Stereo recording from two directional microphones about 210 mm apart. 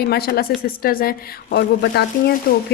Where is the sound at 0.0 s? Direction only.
50° left (ahead or behind).